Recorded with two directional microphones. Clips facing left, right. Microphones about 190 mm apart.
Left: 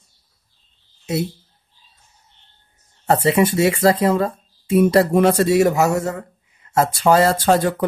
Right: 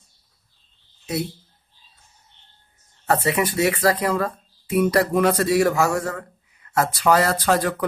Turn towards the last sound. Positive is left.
turn(degrees=25)  # may be behind; listen again after turning